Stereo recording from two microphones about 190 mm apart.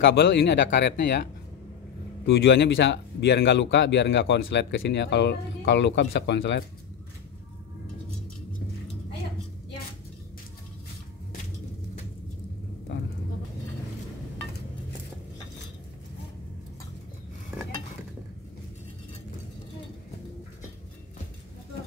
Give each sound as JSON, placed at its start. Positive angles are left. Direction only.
{"t": 0.0, "sound": "speech", "side_deg": 60}
{"t": 2.2, "sound": "speech", "side_deg": 60}